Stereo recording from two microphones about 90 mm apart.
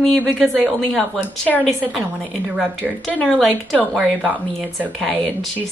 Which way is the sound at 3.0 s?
10° left (ahead or behind).